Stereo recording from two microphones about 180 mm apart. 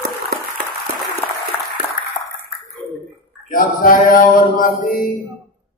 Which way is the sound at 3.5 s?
50° left (ahead or behind).